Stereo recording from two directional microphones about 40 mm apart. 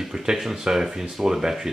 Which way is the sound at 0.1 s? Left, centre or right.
Centre.